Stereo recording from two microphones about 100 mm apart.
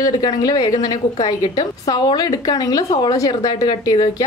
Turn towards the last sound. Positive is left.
turn(degrees=40)  # may be behind; listen again after turning